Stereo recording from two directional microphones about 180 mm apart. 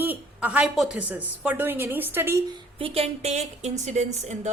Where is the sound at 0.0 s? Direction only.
10° right (ahead or behind).